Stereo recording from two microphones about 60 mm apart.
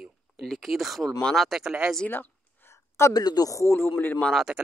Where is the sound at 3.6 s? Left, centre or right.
Left.